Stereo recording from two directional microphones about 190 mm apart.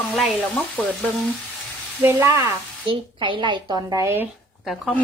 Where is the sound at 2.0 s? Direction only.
15° right (ahead or behind).